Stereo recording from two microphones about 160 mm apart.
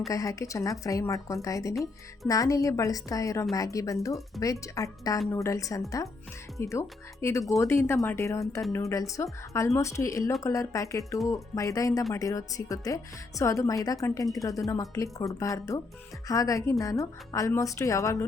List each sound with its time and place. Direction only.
0.1 s a woman's voice: 20° left (ahead or behind)